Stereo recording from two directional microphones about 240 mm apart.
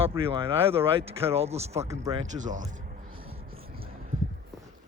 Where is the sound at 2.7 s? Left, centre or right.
Right.